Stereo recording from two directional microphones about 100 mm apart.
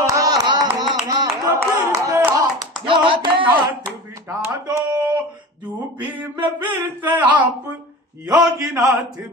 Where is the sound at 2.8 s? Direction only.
60° right (ahead or behind).